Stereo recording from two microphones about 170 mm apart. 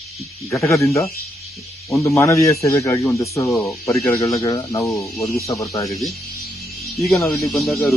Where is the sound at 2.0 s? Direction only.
20° left (ahead or behind).